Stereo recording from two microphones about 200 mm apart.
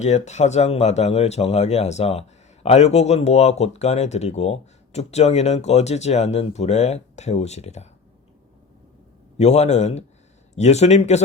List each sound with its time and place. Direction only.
0.0 s speech: 35° left (ahead or behind)
9.4 s speech: 35° left (ahead or behind)